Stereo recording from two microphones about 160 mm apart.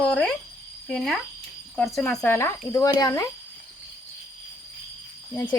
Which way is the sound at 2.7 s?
20° left (ahead or behind).